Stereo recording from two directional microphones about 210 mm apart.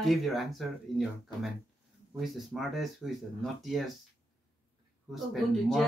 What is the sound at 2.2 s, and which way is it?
Speech, centre (ahead or behind).